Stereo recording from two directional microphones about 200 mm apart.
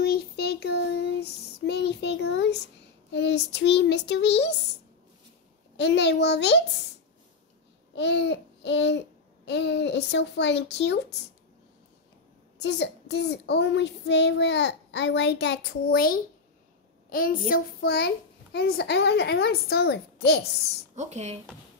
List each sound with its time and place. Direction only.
0.0 s child singing: 50° left (ahead or behind)
5.8 s child singing: 60° left (ahead or behind)
7.9 s babbling: 60° left (ahead or behind)
9.5 s child singing: 60° left (ahead or behind)
12.5 s child singing: 60° left (ahead or behind)
17.1 s a woman's voice: 45° left (ahead or behind)
17.5 s child singing: 55° left (ahead or behind)
20.9 s speech: 35° right (ahead or behind)